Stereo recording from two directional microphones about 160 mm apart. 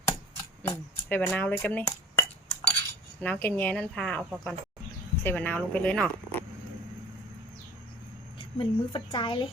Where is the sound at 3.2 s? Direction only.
10° left (ahead or behind).